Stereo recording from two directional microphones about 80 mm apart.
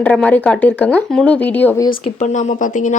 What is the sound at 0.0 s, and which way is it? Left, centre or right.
Speech, centre.